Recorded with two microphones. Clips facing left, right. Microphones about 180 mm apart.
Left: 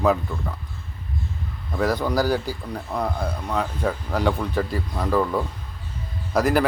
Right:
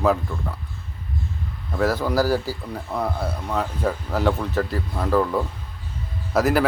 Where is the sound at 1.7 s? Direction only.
5° right (ahead or behind).